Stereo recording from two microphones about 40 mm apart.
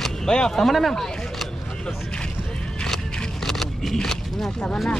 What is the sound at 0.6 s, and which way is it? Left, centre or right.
Speech, centre.